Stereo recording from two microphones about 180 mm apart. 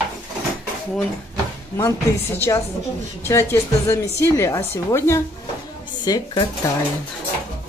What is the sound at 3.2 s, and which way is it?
Speech, 15° left (ahead or behind).